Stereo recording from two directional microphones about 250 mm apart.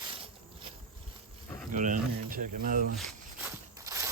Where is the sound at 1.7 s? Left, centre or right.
Right.